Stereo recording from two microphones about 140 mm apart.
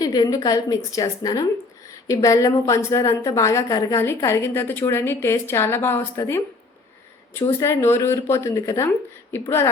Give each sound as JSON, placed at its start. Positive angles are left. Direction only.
{"t": 0.0, "sound": "a woman's voice", "side_deg": 30}